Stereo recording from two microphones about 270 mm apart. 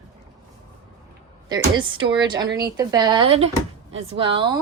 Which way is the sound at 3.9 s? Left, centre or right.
Right.